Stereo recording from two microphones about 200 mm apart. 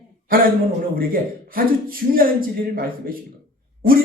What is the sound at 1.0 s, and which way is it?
A man's voice, 45° right (ahead or behind).